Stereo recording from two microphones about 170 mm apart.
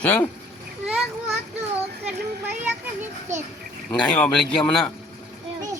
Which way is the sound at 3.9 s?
5° left (ahead or behind).